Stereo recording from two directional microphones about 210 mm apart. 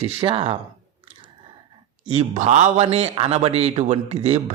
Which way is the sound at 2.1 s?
30° right (ahead or behind).